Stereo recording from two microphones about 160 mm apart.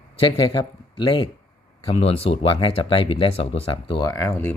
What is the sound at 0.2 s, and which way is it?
Speech, 30° left (ahead or behind).